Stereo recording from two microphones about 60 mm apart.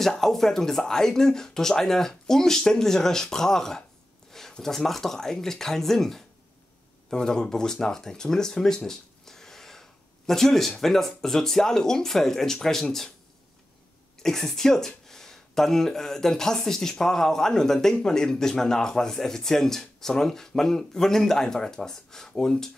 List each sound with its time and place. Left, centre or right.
0.0 s speech: centre
14.2 s speech: centre